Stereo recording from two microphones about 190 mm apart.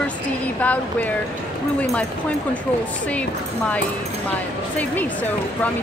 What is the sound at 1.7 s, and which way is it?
Speech, 5° left (ahead or behind).